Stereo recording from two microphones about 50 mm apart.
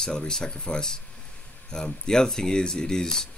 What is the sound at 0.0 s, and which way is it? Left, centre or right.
Speech, centre.